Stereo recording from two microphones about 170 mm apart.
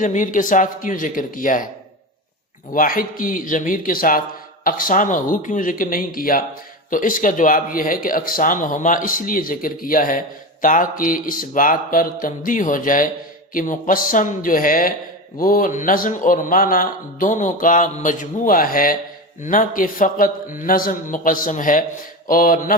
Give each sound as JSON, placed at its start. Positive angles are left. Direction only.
{"t": 0.0, "sound": "speech", "side_deg": 50}
{"t": 2.7, "sound": "speech", "side_deg": 55}